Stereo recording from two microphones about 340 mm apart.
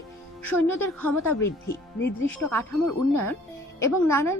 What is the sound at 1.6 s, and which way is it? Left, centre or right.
Speech, left.